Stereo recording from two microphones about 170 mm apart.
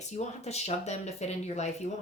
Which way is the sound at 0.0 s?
40° left (ahead or behind).